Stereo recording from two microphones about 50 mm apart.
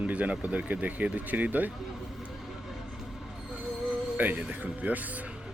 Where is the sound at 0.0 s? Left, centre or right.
Right.